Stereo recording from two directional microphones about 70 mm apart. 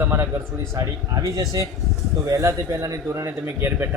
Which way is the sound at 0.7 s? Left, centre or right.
Right.